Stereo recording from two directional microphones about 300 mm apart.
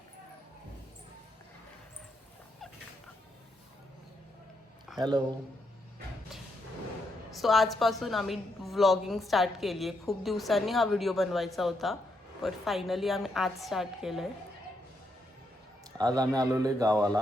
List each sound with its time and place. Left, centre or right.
4.9 s a man's voice: centre
7.3 s a woman's voice: centre
16.0 s speech: centre